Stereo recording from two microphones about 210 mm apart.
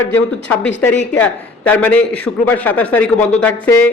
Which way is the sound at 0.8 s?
5° left (ahead or behind).